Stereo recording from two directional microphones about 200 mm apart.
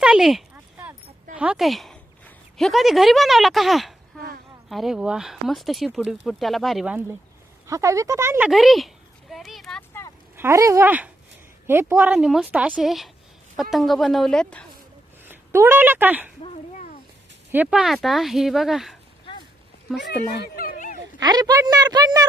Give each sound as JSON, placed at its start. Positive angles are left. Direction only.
{"t": 0.0, "sound": "a sound", "side_deg": -5}
{"t": 1.4, "sound": "speech", "side_deg": -5}
{"t": 7.7, "sound": "speech", "side_deg": -15}
{"t": 8.4, "sound": "speech", "side_deg": 0}
{"t": 10.3, "sound": "speech", "side_deg": -15}
{"t": 15.2, "sound": "a woman's voice", "side_deg": -10}
{"t": 16.4, "sound": "a sound", "side_deg": 35}
{"t": 17.5, "sound": "speech", "side_deg": -5}
{"t": 20.0, "sound": "a sound", "side_deg": 55}
{"t": 21.2, "sound": "a woman's voice", "side_deg": -20}